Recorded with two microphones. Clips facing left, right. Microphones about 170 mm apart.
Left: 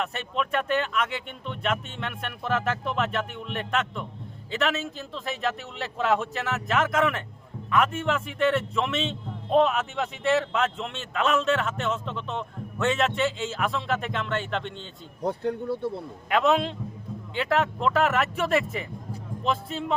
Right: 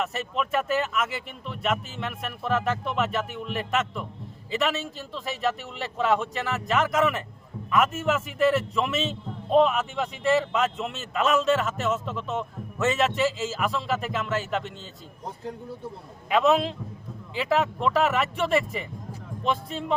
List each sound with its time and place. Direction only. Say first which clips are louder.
0.0 s a man's voice: right 1 dB; centre (ahead or behind)
15.2 s speech: left 9 dB; 65° left (ahead or behind)
16.3 s a man's voice: right 1 dB; centre (ahead or behind)